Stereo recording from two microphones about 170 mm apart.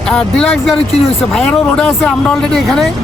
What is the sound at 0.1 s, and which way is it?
Speech, 5° left (ahead or behind).